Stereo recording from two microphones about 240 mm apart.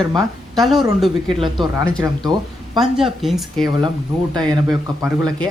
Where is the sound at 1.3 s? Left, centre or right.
Right.